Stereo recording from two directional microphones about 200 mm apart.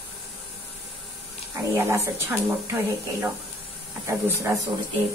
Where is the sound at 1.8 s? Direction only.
15° right (ahead or behind).